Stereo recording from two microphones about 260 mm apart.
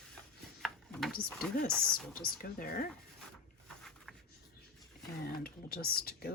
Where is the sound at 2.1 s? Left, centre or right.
Left.